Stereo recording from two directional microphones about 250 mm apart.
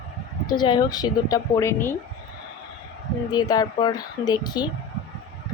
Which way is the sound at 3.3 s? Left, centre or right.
Centre.